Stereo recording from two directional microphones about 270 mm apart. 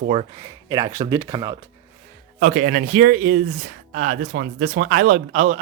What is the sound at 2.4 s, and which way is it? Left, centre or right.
A man's voice, right.